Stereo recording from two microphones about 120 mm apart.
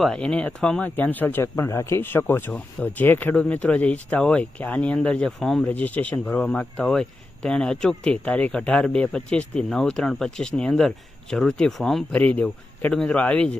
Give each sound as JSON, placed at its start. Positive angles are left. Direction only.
{"t": 0.0, "sound": "speech", "side_deg": 5}
{"t": 12.2, "sound": "speech", "side_deg": 15}